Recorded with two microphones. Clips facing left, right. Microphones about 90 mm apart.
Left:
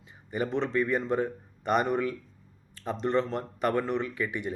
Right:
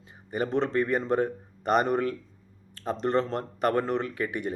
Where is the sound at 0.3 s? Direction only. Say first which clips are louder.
Right 2 dB; 45° right (ahead or behind).